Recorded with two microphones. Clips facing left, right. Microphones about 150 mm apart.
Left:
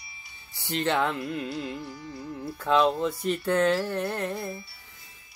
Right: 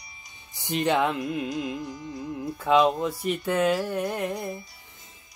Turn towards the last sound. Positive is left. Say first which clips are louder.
# right 2 dB
turn(degrees=-15)  # may be behind; listen again after turning